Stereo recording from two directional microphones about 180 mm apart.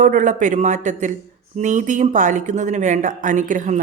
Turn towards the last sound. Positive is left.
turn(degrees=-45)  # may be behind; listen again after turning